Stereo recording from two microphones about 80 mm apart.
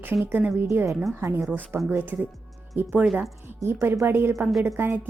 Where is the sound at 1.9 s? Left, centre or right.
Right.